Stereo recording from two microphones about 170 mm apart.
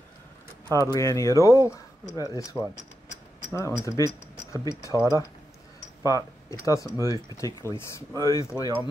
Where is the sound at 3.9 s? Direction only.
20° left (ahead or behind).